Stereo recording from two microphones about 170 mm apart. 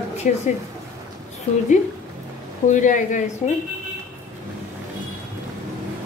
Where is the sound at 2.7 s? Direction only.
50° left (ahead or behind).